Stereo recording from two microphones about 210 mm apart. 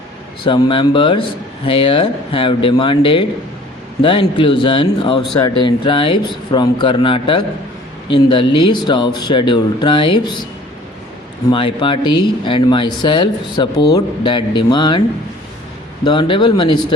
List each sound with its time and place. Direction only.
0.4 s speech: 25° left (ahead or behind)
11.5 s speech: 25° left (ahead or behind)
16.0 s speech: 20° left (ahead or behind)